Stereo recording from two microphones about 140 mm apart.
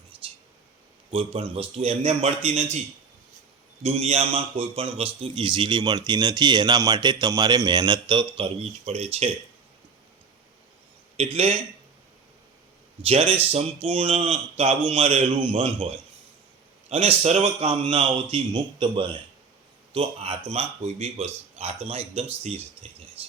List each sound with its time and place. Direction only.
1.1 s speech: 40° right (ahead or behind)
3.8 s a man's voice: 50° right (ahead or behind); by 8.3 s 30° right (ahead or behind)
8.9 s speech: 50° right (ahead or behind)
11.2 s speech: 45° right (ahead or behind)
13.0 s speech: 45° right (ahead or behind)
16.9 s a man's voice: 45° right (ahead or behind)